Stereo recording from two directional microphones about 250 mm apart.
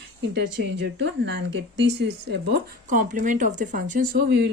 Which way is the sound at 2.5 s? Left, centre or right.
Right.